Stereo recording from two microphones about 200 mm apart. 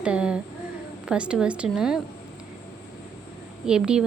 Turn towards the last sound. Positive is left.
turn(degrees=-5)  # may be behind; listen again after turning